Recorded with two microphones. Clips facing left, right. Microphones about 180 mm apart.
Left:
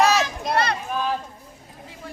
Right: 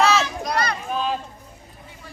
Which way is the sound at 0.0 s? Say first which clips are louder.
Even; 15° left (ahead or behind).